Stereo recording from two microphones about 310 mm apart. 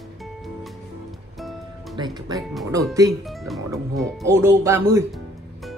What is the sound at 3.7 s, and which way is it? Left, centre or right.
Speech, centre.